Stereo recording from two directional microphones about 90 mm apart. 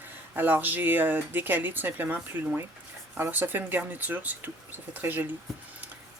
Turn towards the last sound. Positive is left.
turn(degrees=-20)  # may be behind; listen again after turning